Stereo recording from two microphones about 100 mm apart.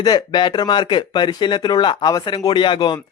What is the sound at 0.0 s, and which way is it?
Speech, 45° left (ahead or behind).